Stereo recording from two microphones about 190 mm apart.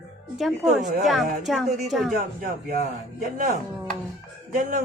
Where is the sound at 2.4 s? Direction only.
50° right (ahead or behind).